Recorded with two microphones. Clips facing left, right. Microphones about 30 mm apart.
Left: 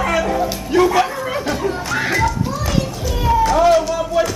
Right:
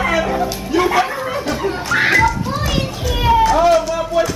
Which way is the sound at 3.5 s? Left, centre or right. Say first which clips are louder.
Even; centre.